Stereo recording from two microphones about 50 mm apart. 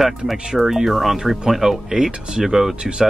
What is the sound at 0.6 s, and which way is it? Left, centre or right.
Speech, centre.